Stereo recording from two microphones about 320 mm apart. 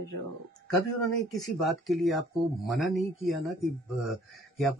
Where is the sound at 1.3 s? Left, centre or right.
Centre.